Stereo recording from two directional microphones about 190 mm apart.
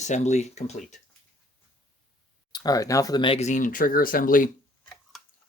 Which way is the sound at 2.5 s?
20° left (ahead or behind).